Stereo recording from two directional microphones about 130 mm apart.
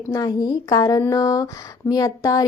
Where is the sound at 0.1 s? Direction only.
30° left (ahead or behind).